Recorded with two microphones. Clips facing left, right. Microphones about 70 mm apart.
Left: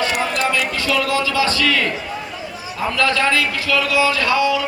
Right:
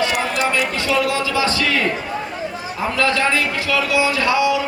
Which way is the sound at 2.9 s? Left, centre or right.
Right.